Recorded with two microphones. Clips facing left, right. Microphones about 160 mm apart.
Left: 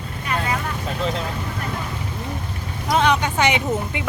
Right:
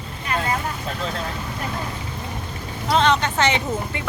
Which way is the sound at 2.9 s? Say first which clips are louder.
Even; 10° left (ahead or behind).